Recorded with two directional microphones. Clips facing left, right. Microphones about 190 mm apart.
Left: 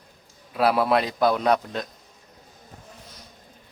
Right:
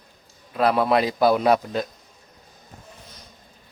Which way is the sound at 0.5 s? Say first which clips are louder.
Right 1 dB; 5° left (ahead or behind).